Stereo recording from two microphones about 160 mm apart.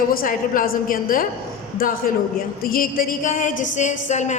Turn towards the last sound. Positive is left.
turn(degrees=45)  # may be behind; listen again after turning